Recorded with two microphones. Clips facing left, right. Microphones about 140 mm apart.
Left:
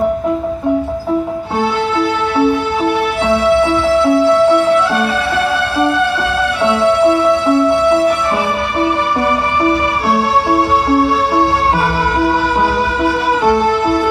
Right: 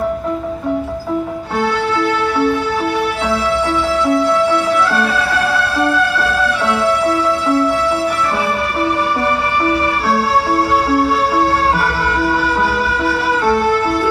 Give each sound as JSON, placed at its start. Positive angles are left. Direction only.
{"t": 1.6, "sound": "music", "side_deg": 15}
{"t": 9.6, "sound": "music", "side_deg": 20}
{"t": 13.0, "sound": "music", "side_deg": 15}